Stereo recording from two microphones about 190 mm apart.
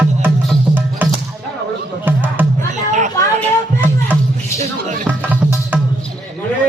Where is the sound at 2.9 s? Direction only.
40° right (ahead or behind).